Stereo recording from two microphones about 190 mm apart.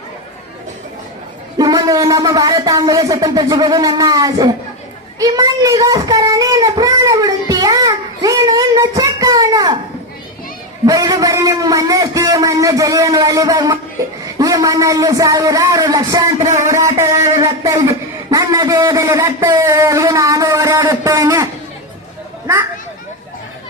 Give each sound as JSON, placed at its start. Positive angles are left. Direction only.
{"t": 1.5, "sound": "speech", "side_deg": -20}
{"t": 5.2, "sound": "a sound", "side_deg": -20}
{"t": 10.8, "sound": "a man's voice", "side_deg": -20}